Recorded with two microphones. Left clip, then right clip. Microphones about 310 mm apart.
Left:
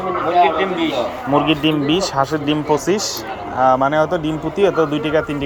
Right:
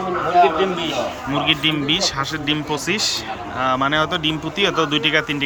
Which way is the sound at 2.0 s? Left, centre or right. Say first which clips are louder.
Left 4 dB; centre.